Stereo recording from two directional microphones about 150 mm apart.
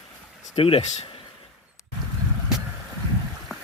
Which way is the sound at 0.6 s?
40° left (ahead or behind).